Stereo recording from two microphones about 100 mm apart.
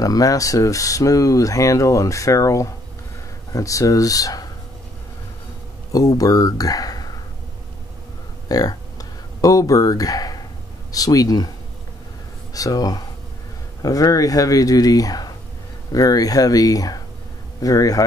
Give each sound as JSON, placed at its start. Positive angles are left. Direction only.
{"t": 0.0, "sound": "speech", "side_deg": 35}
{"t": 5.9, "sound": "speech", "side_deg": 35}
{"t": 8.5, "sound": "a sound", "side_deg": 40}
{"t": 10.9, "sound": "speech", "side_deg": 35}
{"t": 12.5, "sound": "speech", "side_deg": 35}